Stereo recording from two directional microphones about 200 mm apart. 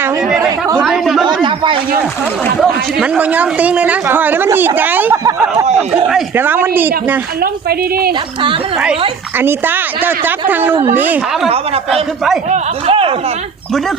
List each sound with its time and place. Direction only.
0.0 s speech: 5° right (ahead or behind)
2.6 s a man's voice: 5° right (ahead or behind)
7.7 s speech: 50° right (ahead or behind)
9.4 s a man's voice: 10° right (ahead or behind)
11.4 s speech: 30° right (ahead or behind)